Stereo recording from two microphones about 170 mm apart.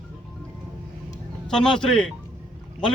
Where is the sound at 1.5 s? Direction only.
5° left (ahead or behind).